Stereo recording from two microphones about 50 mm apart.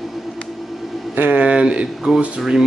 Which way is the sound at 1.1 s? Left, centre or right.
Right.